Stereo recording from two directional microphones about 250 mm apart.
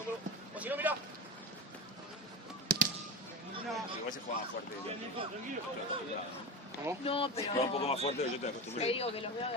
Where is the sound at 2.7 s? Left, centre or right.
Right.